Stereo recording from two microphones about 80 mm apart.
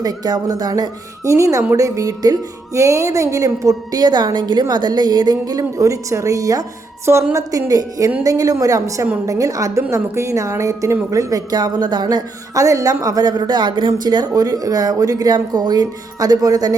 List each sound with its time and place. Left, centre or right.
0.0 s speech: right
1.2 s speech: right
4.0 s speech: right
7.0 s speech: right
7.3 s speech: right
12.0 s speech: right